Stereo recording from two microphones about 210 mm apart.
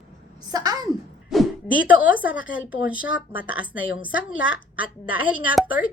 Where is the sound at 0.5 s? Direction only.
20° right (ahead or behind).